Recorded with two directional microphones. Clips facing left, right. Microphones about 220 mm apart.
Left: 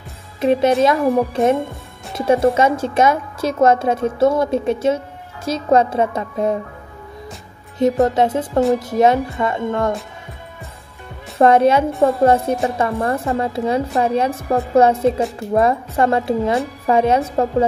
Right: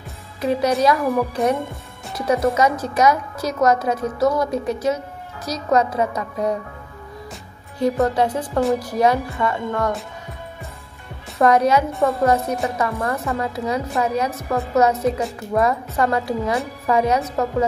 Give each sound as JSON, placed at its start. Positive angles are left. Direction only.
{"t": 0.4, "sound": "a woman's voice", "side_deg": 25}
{"t": 7.8, "sound": "a woman's voice", "side_deg": 20}
{"t": 11.3, "sound": "a woman's voice", "side_deg": 25}